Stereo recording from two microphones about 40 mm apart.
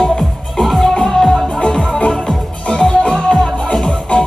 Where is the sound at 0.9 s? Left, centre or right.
Centre.